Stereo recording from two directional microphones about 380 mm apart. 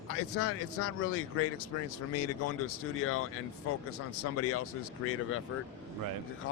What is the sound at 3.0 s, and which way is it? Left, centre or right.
Speech, left.